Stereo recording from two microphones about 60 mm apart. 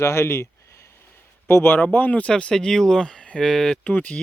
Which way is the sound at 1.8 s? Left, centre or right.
Left.